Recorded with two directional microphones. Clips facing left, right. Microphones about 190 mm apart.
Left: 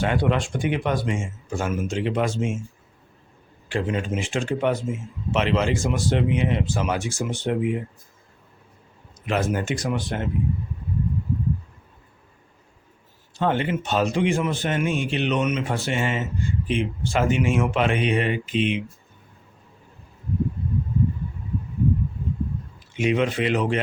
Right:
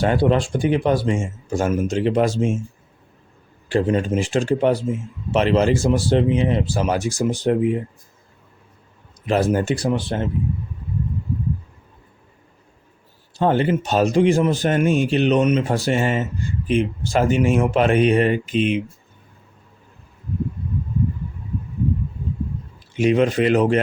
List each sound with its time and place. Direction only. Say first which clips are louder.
0.0 s speech: right 5 dB; 35° right (ahead or behind)
3.7 s speech: right 6 dB; 35° right (ahead or behind)
9.2 s speech: right 5 dB; 35° right (ahead or behind)
13.3 s speech: right 5 dB; 35° right (ahead or behind)
23.0 s speech: right 5 dB; 40° right (ahead or behind)